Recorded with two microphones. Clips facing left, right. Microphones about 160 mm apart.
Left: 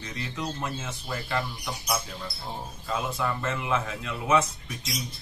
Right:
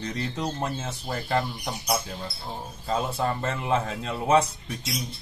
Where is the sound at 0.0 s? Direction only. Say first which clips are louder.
Right 4 dB; 35° right (ahead or behind).